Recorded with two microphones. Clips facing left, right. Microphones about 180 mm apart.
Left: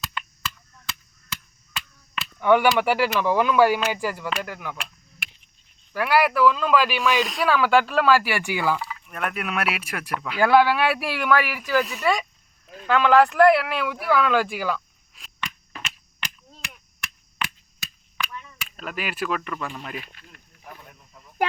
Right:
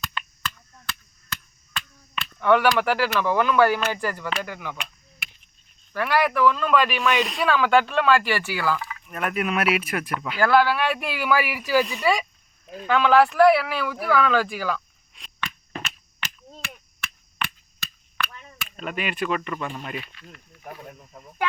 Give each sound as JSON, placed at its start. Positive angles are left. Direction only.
{"t": 0.0, "sound": "a sound", "side_deg": 5}
{"t": 3.8, "sound": "speech", "side_deg": 10}
{"t": 5.9, "sound": "speech", "side_deg": 5}
{"t": 8.8, "sound": "speech", "side_deg": 0}
{"t": 10.4, "sound": "speech", "side_deg": 15}
{"t": 15.8, "sound": "a sound", "side_deg": -5}
{"t": 17.3, "sound": "chop", "side_deg": 10}
{"t": 18.3, "sound": "a sound", "side_deg": -40}
{"t": 18.8, "sound": "speech", "side_deg": 0}